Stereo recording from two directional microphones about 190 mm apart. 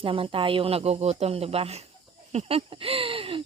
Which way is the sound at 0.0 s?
30° right (ahead or behind).